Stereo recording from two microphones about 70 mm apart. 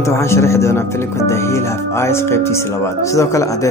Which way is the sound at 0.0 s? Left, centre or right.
Left.